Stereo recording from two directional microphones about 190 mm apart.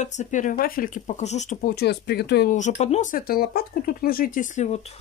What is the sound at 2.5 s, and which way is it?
Speech, 40° left (ahead or behind).